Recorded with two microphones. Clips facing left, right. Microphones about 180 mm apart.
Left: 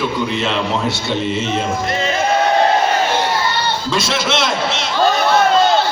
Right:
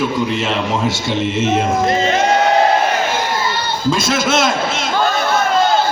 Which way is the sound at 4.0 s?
50° right (ahead or behind).